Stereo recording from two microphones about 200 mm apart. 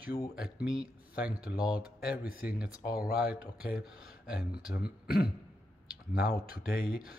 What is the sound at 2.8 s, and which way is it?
Speech, 50° left (ahead or behind).